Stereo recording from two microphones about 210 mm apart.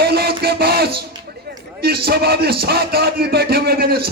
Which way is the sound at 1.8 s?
50° right (ahead or behind).